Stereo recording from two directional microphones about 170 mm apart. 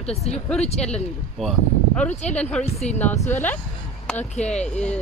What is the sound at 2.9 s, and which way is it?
Speech, 40° left (ahead or behind).